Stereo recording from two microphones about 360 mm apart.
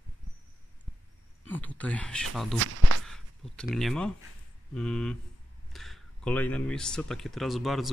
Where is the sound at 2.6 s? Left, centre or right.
Right.